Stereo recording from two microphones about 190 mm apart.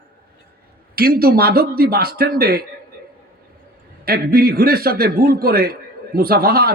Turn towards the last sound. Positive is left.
turn(degrees=-55)  # may be behind; listen again after turning